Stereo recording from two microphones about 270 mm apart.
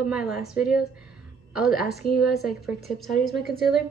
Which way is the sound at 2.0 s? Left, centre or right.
Left.